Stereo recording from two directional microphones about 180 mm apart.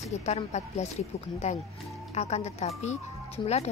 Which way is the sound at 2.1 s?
35° left (ahead or behind).